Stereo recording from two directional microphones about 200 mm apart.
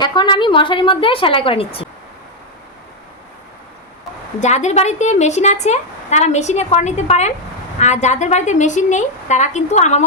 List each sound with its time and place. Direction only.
0.0 s a woman's voice: 20° left (ahead or behind)
4.4 s a woman's voice: 35° left (ahead or behind)